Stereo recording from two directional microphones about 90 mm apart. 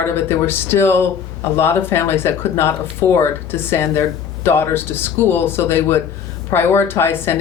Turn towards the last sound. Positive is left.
turn(degrees=25)  # may be behind; listen again after turning